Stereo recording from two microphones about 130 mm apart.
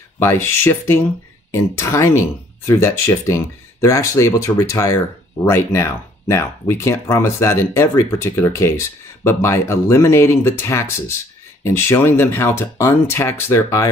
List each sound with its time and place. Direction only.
0.2 s speech: 20° left (ahead or behind)